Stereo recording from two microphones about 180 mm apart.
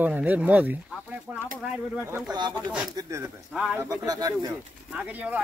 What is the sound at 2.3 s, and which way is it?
Speech, 25° right (ahead or behind).